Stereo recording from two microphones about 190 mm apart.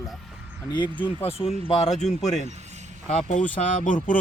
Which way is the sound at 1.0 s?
30° left (ahead or behind).